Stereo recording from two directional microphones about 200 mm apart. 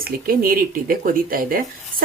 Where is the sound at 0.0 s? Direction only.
45° right (ahead or behind).